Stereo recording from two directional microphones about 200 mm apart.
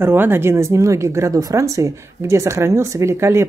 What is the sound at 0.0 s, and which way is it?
Speech, 10° right (ahead or behind).